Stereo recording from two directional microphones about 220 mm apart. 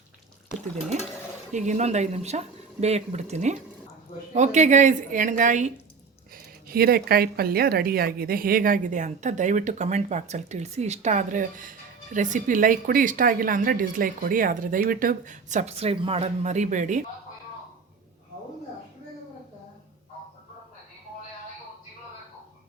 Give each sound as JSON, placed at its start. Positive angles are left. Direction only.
{"t": 1.5, "sound": "speech", "side_deg": -35}